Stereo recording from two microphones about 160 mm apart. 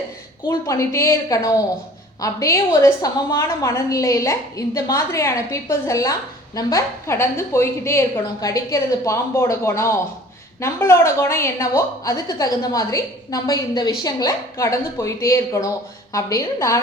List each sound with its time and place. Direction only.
0.4 s a woman's voice: 20° left (ahead or behind)